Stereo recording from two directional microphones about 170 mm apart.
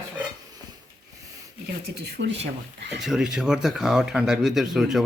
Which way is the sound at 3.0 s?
Centre (ahead or behind).